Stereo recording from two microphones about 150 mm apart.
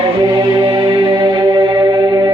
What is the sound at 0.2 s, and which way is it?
Music, 25° right (ahead or behind).